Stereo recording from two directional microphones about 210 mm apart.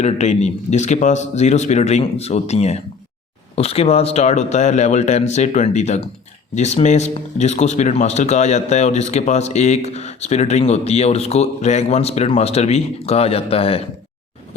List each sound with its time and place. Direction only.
0.0 s speech: 30° left (ahead or behind)